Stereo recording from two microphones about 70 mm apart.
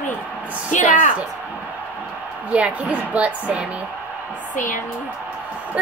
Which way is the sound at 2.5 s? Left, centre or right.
Centre.